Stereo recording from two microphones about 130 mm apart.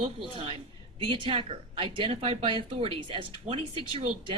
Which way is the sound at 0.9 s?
40° right (ahead or behind).